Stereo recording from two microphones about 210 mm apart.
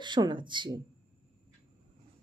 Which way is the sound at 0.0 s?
20° right (ahead or behind).